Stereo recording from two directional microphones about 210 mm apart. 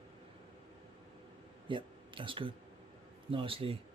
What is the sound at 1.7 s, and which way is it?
Speech, 25° right (ahead or behind).